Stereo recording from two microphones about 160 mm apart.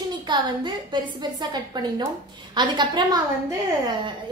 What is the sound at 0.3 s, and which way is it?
A woman's voice, 30° right (ahead or behind).